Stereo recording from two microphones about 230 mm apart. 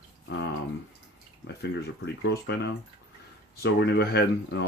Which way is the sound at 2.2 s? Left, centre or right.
Left.